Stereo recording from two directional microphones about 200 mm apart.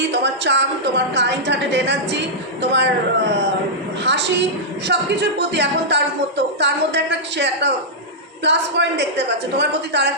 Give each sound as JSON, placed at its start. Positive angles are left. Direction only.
{"t": 0.1, "sound": "a woman's voice", "side_deg": -60}
{"t": 4.0, "sound": "a woman's voice", "side_deg": -60}